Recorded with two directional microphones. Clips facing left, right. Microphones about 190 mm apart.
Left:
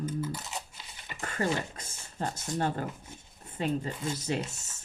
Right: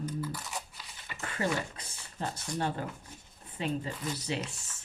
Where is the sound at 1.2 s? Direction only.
45° left (ahead or behind).